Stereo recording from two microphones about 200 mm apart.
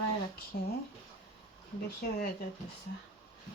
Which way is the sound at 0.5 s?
50° left (ahead or behind).